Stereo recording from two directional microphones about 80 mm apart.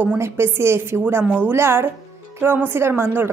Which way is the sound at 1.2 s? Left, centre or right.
Right.